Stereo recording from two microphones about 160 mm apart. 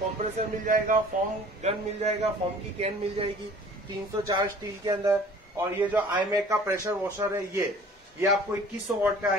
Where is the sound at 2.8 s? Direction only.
40° right (ahead or behind).